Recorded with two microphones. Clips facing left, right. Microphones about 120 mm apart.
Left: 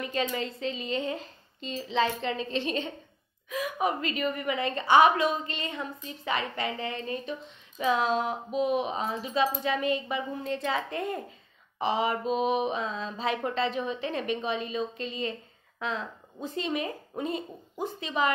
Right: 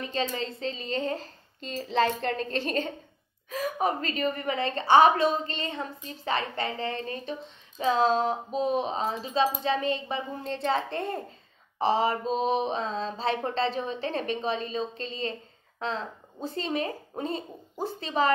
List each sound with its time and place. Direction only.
0.0 s a woman's voice: 30° right (ahead or behind)